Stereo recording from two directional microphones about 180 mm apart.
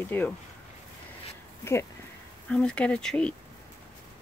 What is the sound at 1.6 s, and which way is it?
Speech, 15° left (ahead or behind).